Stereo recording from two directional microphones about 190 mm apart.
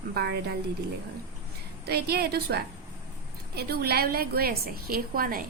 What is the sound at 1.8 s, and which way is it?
A woman's voice, 55° right (ahead or behind).